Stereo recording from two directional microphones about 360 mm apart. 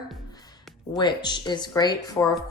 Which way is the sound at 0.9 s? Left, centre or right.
Centre.